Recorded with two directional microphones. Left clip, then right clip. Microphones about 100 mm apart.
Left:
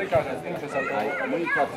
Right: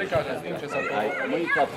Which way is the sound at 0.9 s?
25° right (ahead or behind).